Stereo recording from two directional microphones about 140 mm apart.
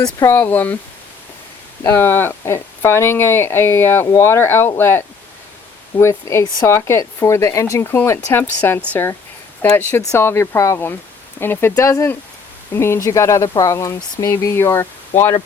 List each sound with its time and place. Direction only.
0.0 s speech: 20° left (ahead or behind)
1.8 s speech: 20° left (ahead or behind)